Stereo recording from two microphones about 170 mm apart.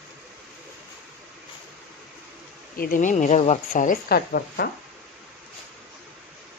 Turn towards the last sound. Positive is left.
turn(degrees=70)  # may be behind; listen again after turning